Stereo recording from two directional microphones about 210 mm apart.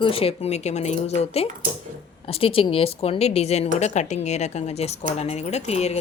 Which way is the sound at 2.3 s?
25° left (ahead or behind).